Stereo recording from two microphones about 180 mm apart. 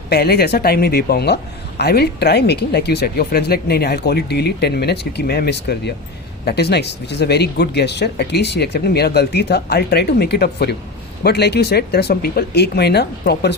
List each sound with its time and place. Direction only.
0.1 s speech: 60° left (ahead or behind)